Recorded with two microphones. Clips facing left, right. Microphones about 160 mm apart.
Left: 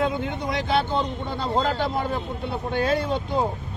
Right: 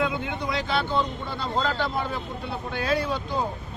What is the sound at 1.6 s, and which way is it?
Speech, 45° left (ahead or behind).